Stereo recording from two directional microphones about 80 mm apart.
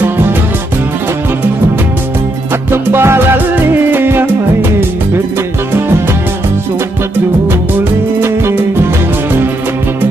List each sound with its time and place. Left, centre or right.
2.7 s music: right
8.2 s music: right